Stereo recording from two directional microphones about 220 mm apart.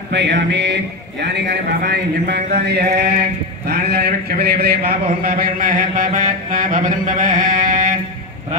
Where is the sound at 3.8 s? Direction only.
45° right (ahead or behind).